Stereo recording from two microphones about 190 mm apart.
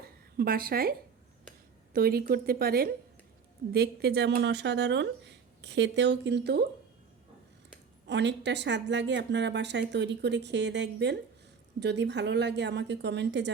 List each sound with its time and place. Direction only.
0.3 s a woman's voice: 50° right (ahead or behind)
8.0 s a woman's voice: 65° right (ahead or behind)